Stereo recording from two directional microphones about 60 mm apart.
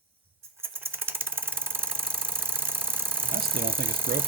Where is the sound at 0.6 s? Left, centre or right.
Right.